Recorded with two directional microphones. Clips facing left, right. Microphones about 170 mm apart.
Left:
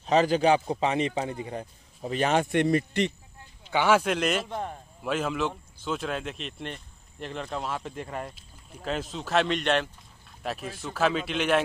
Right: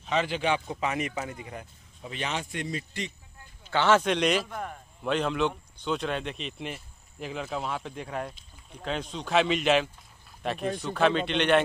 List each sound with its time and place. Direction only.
0.0 s a man's voice: 40° left (ahead or behind); by 3.1 s 65° left (ahead or behind)
3.7 s speech: 10° left (ahead or behind)
4.5 s a man's voice: 25° left (ahead or behind)
5.0 s speech: 5° left (ahead or behind)